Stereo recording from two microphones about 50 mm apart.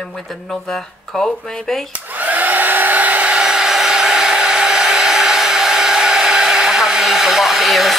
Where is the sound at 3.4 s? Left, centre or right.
Centre.